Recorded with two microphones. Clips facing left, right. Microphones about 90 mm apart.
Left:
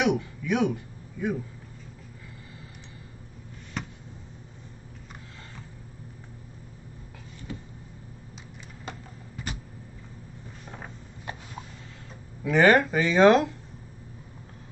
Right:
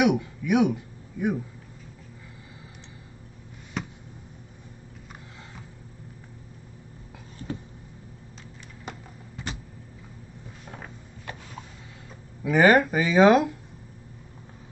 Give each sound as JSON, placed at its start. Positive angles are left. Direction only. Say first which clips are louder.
{"t": 0.0, "sound": "speech", "louder": "right 3 dB", "side_deg": -15}
{"t": 3.8, "sound": "a sound", "louder": "right 2 dB", "side_deg": -5}
{"t": 12.4, "sound": "speech", "louder": "right 1 dB", "side_deg": -5}